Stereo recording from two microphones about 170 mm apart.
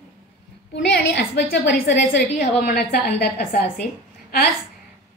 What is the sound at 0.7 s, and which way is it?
A woman's voice, 90° left.